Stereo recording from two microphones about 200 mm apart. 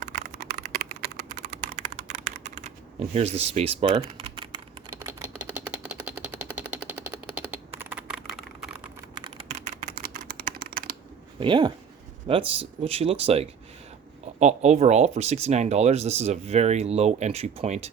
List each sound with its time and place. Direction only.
0.0 s typing: 40° right (ahead or behind); by 4.4 s 25° right (ahead or behind)
4.9 s a sound: 10° right (ahead or behind)
7.8 s typing: 5° right (ahead or behind)
9.1 s typing: 25° right (ahead or behind); by 10.8 s 50° right (ahead or behind)
11.3 s speech: 25° right (ahead or behind)